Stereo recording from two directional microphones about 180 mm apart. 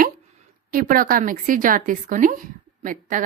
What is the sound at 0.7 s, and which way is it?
A woman's voice, 50° right (ahead or behind).